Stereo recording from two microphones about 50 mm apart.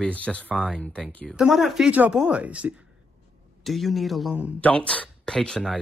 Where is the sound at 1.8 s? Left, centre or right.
Right.